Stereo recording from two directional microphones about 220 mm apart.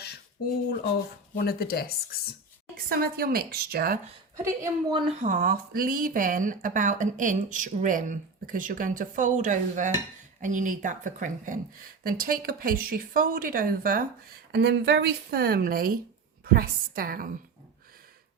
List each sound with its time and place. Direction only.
0.4 s speech: 45° left (ahead or behind)
2.7 s speech: 40° right (ahead or behind)
4.4 s a woman's voice: 15° right (ahead or behind)
5.2 s speech: 40° right (ahead or behind)